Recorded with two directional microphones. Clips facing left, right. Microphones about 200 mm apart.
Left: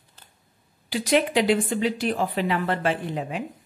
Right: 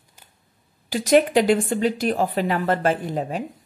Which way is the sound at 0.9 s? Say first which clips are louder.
Right 5 dB; 45° right (ahead or behind).